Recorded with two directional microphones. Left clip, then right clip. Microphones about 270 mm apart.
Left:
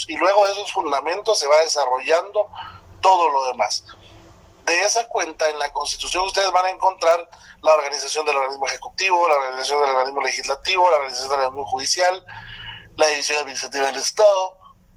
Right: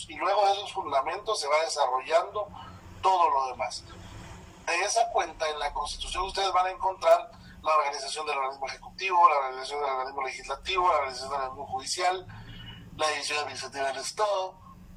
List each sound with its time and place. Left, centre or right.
0.1 s a man's voice: left
13.0 s a man's voice: left